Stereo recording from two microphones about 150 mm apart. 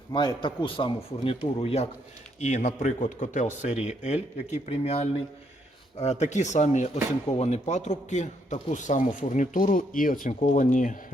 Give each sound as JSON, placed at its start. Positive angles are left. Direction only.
{"t": 0.1, "sound": "speech", "side_deg": 30}
{"t": 2.4, "sound": "a man's voice", "side_deg": 50}